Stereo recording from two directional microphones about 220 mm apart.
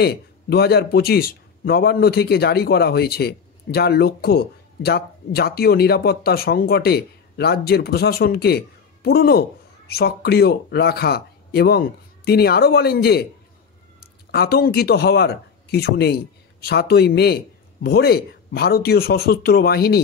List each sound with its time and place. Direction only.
0.0 s a man's voice: 45° left (ahead or behind)
14.3 s a man's voice: 45° left (ahead or behind)